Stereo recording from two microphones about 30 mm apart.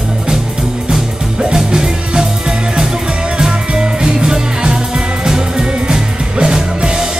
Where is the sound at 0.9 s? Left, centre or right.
Right.